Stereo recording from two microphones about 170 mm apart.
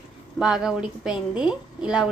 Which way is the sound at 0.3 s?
5° right (ahead or behind).